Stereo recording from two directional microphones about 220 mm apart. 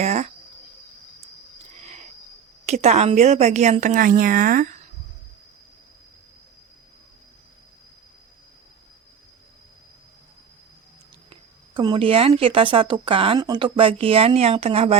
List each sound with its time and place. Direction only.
0.0 s a sound: 30° right (ahead or behind)
2.6 s a woman's voice: 30° right (ahead or behind)
11.7 s speech: 20° right (ahead or behind)